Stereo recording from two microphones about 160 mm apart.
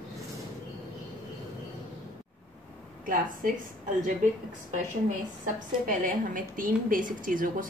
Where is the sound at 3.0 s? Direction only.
60° right (ahead or behind).